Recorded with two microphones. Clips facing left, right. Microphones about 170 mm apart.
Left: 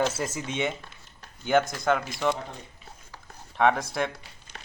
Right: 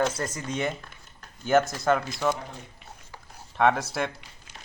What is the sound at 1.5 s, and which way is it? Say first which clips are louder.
Speech: right 1 dB; centre (ahead or behind).